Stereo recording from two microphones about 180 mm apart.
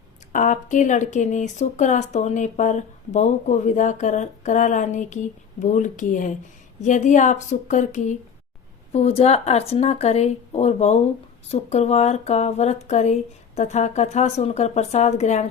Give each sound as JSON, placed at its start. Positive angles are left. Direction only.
{"t": 0.3, "sound": "speech", "side_deg": 45}